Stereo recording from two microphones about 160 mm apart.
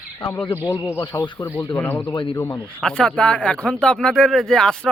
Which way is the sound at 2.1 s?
30° left (ahead or behind).